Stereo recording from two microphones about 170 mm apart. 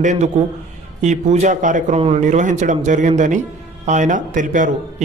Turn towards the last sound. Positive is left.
turn(degrees=-50)  # may be behind; listen again after turning